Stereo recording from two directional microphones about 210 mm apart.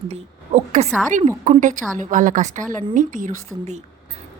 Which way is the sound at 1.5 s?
40° right (ahead or behind).